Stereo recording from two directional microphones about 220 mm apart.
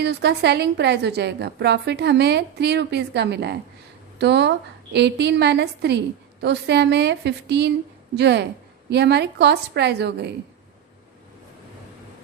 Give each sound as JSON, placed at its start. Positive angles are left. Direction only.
{"t": 0.0, "sound": "a woman's voice", "side_deg": -50}